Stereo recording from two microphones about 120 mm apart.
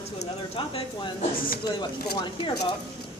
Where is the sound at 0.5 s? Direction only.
50° left (ahead or behind).